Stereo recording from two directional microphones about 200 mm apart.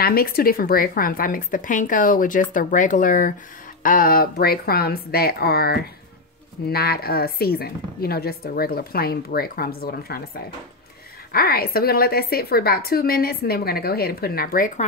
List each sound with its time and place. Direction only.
0.0 s speech: 50° left (ahead or behind)